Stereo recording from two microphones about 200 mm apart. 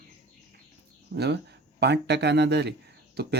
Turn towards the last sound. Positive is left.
turn(degrees=-55)  # may be behind; listen again after turning